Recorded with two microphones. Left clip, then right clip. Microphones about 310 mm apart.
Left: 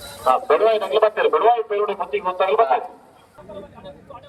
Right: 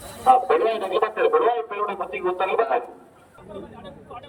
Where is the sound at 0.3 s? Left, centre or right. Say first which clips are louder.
Left 1 dB; centre.